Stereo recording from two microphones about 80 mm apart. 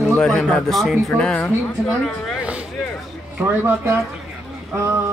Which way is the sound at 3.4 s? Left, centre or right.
Right.